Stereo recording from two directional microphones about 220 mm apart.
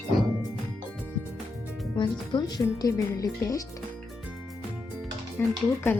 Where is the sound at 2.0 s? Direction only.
20° left (ahead or behind).